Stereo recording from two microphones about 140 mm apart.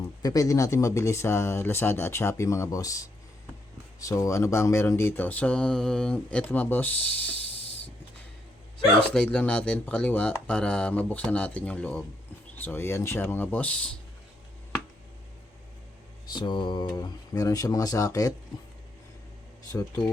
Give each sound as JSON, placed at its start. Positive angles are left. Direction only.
{"t": 0.2, "sound": "speech", "side_deg": 25}
{"t": 9.0, "sound": "speech", "side_deg": 5}
{"t": 16.2, "sound": "speech", "side_deg": 30}
{"t": 20.0, "sound": "speech", "side_deg": 30}